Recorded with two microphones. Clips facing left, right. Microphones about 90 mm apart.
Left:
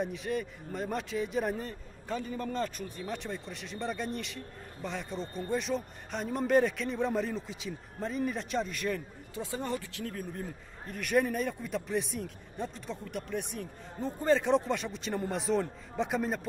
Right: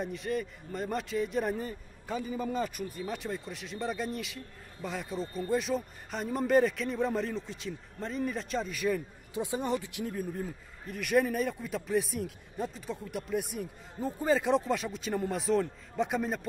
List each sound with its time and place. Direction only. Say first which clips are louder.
0.0 s speech: even; centre (ahead or behind)
9.3 s speech: right 4 dB; 15° right (ahead or behind); by 16.3 s centre (ahead or behind)